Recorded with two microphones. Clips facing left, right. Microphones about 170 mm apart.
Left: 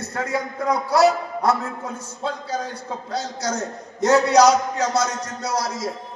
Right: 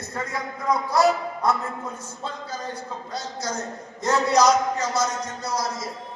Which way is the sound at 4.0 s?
75° left (ahead or behind).